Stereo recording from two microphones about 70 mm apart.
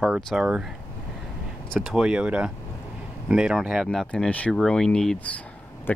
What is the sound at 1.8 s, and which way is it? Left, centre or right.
Speech, centre.